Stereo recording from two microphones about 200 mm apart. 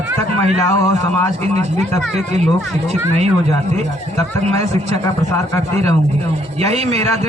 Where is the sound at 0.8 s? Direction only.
10° left (ahead or behind).